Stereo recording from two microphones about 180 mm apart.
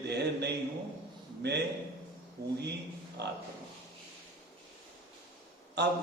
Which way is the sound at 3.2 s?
65° right (ahead or behind).